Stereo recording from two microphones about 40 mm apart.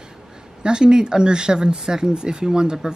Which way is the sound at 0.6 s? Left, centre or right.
Right.